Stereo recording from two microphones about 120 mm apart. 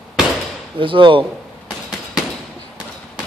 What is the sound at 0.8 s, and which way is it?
Mantra, 45° right (ahead or behind).